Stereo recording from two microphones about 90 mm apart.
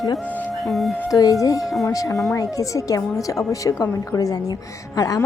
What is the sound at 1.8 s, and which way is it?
A woman's voice, 40° left (ahead or behind).